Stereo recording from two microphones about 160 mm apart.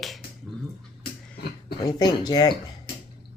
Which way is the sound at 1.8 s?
25° left (ahead or behind).